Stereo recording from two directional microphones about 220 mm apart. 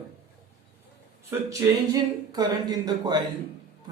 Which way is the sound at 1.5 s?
15° right (ahead or behind).